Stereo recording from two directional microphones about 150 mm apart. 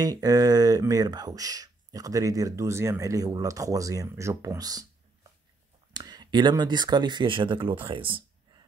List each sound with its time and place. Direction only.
0.0 s speech: 25° right (ahead or behind)
5.9 s speech: 25° right (ahead or behind)